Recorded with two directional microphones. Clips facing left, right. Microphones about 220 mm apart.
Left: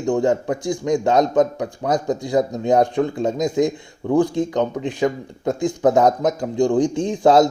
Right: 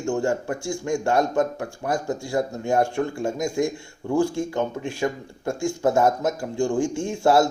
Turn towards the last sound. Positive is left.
turn(degrees=20)  # may be behind; listen again after turning